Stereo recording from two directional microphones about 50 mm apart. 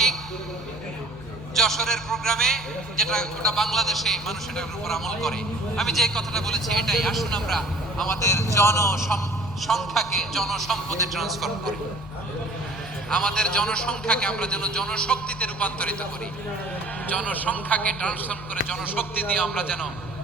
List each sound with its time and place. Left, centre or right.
1.5 s a man's voice: centre
8.2 s a man's voice: left
9.6 s a man's voice: centre
13.1 s a man's voice: centre
17.1 s a man's voice: left